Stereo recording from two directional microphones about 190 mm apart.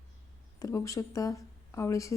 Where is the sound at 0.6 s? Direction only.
15° left (ahead or behind).